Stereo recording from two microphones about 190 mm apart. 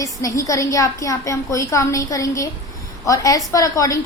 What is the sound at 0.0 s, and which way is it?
A woman's voice, 15° left (ahead or behind).